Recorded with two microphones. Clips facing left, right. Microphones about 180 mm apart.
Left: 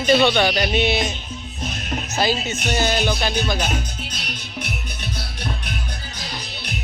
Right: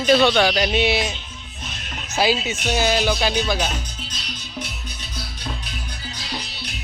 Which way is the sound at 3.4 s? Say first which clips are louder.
Right 1 dB; 5° right (ahead or behind).